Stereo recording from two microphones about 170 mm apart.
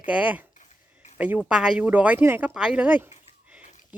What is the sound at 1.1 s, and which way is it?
Speech, 10° right (ahead or behind).